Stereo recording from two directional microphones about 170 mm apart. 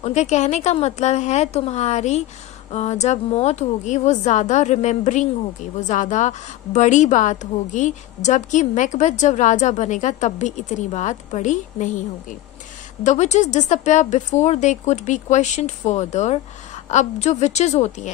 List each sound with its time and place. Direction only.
0.0 s a woman's voice: 40° left (ahead or behind)
13.0 s a woman's voice: 45° left (ahead or behind)